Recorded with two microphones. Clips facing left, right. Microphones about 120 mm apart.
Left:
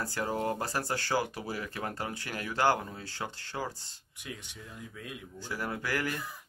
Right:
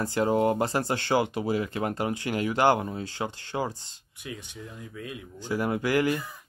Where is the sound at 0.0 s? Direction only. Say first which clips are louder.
Right 9 dB; 20° right (ahead or behind).